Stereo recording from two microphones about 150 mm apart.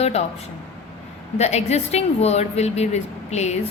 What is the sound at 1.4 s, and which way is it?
A woman's voice, 45° left (ahead or behind).